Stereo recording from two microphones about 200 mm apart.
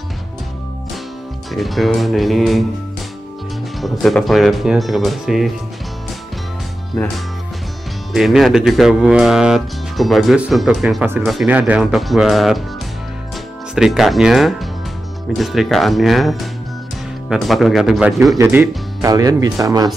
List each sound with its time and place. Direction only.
1.5 s speech: centre (ahead or behind)
3.8 s speech: centre (ahead or behind)
7.0 s speech: 10° left (ahead or behind)
8.1 s speech: centre (ahead or behind)
13.7 s speech: centre (ahead or behind)
18.4 s speech: 10° right (ahead or behind)